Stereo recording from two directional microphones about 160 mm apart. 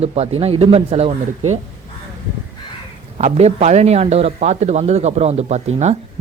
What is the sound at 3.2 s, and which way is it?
A man's voice, 45° right (ahead or behind).